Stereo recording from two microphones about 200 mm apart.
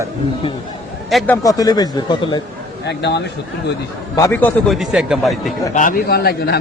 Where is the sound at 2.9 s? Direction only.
60° left (ahead or behind).